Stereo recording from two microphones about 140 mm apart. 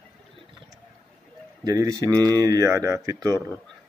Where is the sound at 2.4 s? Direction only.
25° right (ahead or behind).